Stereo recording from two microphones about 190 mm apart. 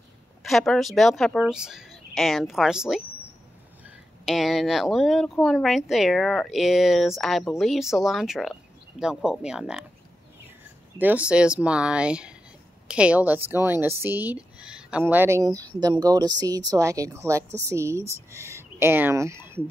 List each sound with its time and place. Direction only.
0.4 s speech: centre (ahead or behind)
4.3 s speech: centre (ahead or behind)
11.0 s a woman's voice: 10° right (ahead or behind)